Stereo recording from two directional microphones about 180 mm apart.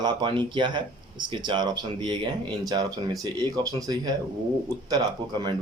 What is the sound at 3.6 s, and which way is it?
Speech, 20° right (ahead or behind).